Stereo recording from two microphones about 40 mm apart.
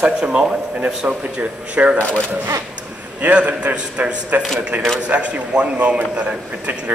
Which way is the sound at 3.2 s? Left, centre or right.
Right.